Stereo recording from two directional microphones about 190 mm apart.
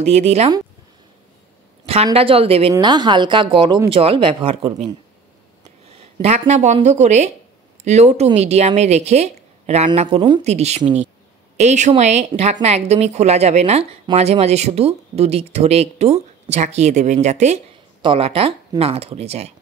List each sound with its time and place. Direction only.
0.0 s speech: 35° right (ahead or behind)
2.1 s speech: 30° right (ahead or behind)
5.9 s speech: 30° right (ahead or behind)